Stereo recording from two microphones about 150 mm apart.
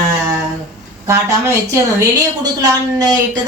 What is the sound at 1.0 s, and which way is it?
A woman's voice, 20° right (ahead or behind).